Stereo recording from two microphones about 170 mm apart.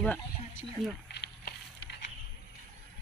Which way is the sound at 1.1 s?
80° left.